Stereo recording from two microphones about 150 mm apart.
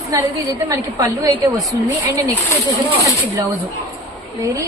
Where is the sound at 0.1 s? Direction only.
20° right (ahead or behind).